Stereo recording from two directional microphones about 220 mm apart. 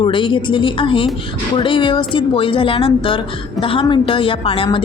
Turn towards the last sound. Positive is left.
turn(degrees=25)  # may be behind; listen again after turning